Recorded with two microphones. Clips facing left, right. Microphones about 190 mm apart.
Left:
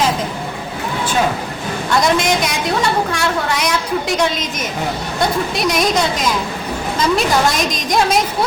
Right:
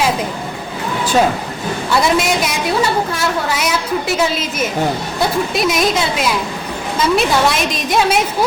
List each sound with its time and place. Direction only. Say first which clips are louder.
2.0 s a woman's voice: even; 5° right (ahead or behind)
5.5 s a woman's voice: even; centre (ahead or behind)